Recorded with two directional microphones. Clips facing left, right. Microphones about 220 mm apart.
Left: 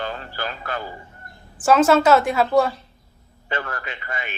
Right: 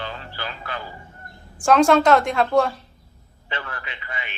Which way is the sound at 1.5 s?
5° left (ahead or behind).